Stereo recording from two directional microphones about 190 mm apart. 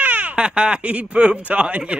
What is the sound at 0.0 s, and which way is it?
Speech, 10° right (ahead or behind).